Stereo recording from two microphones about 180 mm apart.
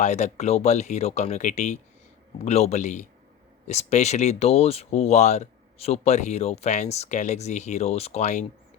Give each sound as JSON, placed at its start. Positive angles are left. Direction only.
{"t": 0.0, "sound": "speech", "side_deg": 40}